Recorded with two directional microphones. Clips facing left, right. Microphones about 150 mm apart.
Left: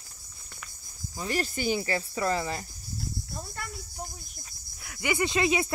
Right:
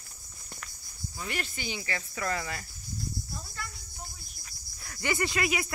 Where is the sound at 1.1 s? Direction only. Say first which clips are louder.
Left 7 dB; 35° left (ahead or behind).